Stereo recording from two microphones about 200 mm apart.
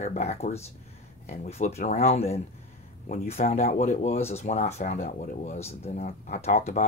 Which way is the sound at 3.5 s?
35° left (ahead or behind).